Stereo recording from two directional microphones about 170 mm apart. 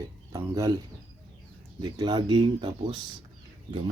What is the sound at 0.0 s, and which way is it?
Speech, 20° right (ahead or behind).